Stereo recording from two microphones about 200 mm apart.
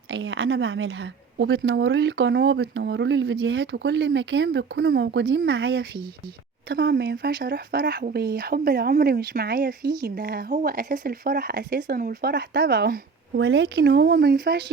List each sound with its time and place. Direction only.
0.1 s a woman's voice: 65° right (ahead or behind)